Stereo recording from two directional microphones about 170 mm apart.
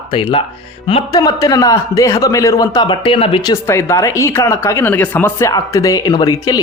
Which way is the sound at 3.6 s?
15° left (ahead or behind).